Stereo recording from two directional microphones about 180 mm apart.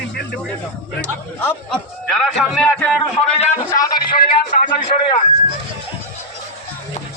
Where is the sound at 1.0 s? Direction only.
5° left (ahead or behind).